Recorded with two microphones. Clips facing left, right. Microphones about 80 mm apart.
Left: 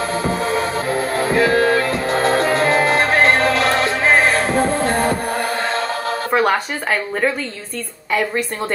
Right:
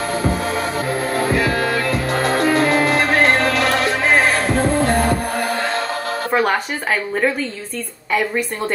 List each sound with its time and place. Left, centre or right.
2.3 s music: left
6.3 s a sound: centre
8.1 s a woman's voice: centre